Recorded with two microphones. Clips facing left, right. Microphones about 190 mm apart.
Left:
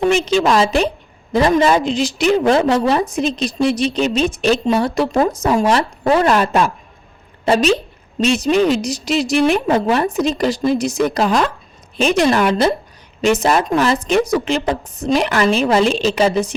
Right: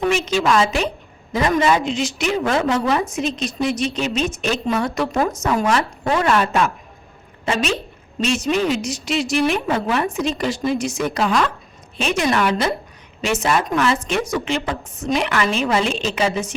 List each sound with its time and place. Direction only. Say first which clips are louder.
0.4 s a woman's voice: left 3 dB; 35° left (ahead or behind)